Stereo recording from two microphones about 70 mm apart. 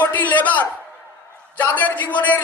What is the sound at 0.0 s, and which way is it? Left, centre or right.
A man's voice, left.